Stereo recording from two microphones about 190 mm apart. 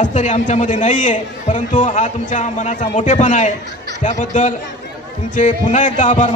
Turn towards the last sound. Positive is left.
turn(degrees=40)  # may be behind; listen again after turning